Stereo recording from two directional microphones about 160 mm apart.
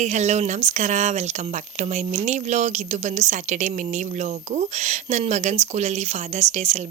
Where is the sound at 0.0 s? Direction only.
45° right (ahead or behind).